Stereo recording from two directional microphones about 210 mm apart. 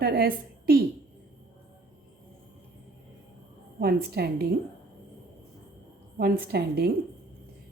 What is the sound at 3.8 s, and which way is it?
Speech, 45° right (ahead or behind).